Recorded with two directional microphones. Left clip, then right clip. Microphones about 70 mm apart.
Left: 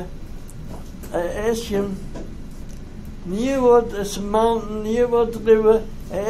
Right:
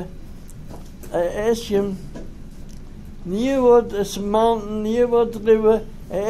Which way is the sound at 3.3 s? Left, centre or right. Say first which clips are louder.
Right 1 dB; right.